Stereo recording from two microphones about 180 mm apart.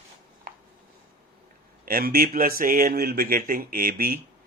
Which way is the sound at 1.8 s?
55° right (ahead or behind).